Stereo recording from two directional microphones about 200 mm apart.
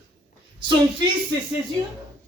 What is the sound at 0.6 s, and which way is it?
Speech, 25° right (ahead or behind).